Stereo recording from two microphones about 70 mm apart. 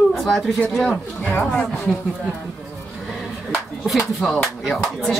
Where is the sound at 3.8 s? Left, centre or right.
Centre.